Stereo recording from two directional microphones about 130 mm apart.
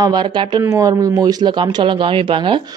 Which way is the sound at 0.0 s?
35° right (ahead or behind).